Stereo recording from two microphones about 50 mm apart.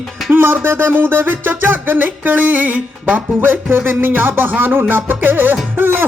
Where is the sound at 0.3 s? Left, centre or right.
Right.